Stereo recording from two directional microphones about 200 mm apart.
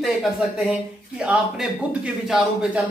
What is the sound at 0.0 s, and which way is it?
Speech, centre (ahead or behind).